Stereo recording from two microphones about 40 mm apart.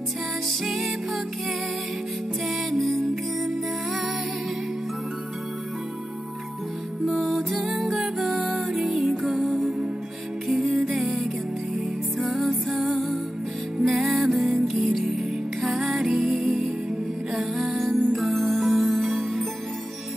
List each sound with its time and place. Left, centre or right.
0.5 s music: centre
2.4 s music: centre
7.2 s music: centre